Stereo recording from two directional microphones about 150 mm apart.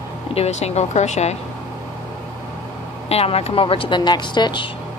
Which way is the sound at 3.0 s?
45° left (ahead or behind).